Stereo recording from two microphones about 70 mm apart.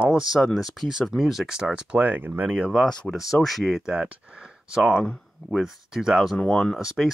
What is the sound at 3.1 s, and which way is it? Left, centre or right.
Speech, centre.